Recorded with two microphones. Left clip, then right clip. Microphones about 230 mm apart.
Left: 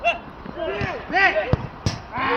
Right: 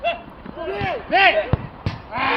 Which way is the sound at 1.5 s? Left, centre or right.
Left.